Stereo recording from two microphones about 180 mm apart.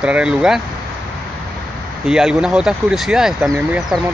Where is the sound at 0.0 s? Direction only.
5° right (ahead or behind).